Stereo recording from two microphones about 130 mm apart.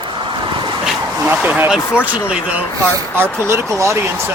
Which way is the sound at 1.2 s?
15° right (ahead or behind).